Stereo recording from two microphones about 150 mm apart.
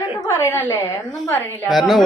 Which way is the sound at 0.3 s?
15° left (ahead or behind).